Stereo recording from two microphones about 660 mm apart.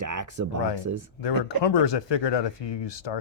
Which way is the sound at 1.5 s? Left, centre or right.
Left.